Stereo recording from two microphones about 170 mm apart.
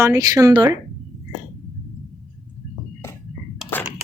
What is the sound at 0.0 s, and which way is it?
Speech, 20° right (ahead or behind).